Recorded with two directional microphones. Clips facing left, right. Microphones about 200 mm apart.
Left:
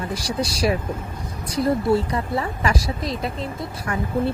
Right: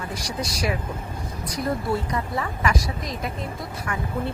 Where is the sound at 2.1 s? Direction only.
30° left (ahead or behind).